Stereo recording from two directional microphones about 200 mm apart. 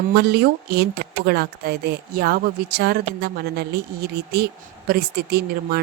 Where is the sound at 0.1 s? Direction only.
55° right (ahead or behind).